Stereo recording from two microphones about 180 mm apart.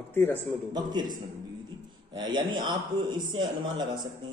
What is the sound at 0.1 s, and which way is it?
Speech, 10° left (ahead or behind).